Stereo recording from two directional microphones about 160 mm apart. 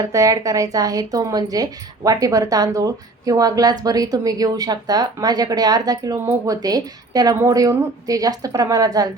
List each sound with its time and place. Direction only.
0.0 s a woman's voice: 20° right (ahead or behind)